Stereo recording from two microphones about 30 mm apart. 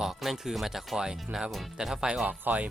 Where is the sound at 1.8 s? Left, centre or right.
Right.